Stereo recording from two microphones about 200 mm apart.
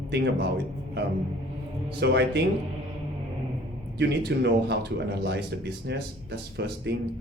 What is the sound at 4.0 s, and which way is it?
Speech, 55° right (ahead or behind).